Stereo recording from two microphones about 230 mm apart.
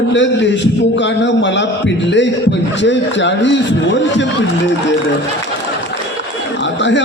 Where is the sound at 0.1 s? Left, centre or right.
Left.